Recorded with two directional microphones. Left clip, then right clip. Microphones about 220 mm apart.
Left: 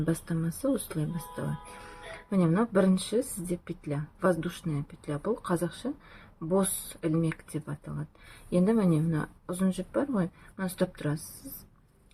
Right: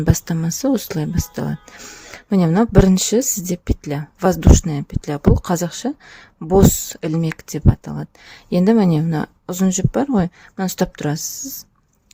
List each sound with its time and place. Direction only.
0.0 s speech: 45° right (ahead or behind)
2.3 s speech: 45° right (ahead or behind)